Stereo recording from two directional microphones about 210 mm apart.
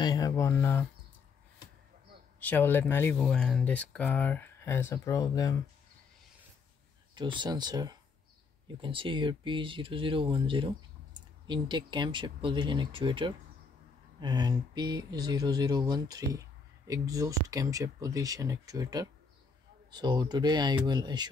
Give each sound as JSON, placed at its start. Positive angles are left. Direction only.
{"t": 0.0, "sound": "speech", "side_deg": 15}
{"t": 2.4, "sound": "speech", "side_deg": 10}
{"t": 7.2, "sound": "speech", "side_deg": -20}